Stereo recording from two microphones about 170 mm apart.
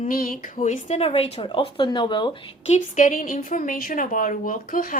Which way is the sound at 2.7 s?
50° left (ahead or behind).